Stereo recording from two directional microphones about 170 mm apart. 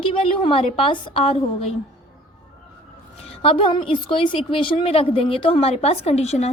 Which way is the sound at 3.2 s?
35° left (ahead or behind).